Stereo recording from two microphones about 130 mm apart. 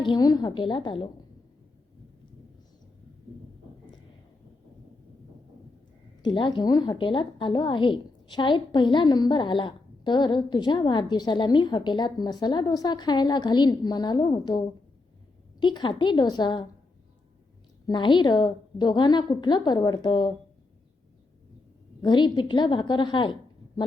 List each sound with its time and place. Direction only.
0.0 s a woman's voice: 35° left (ahead or behind)
6.2 s a woman's voice: 40° left (ahead or behind)
15.6 s a woman's voice: 35° left (ahead or behind)
17.8 s a woman's voice: 35° left (ahead or behind)
22.0 s a woman's voice: 35° left (ahead or behind)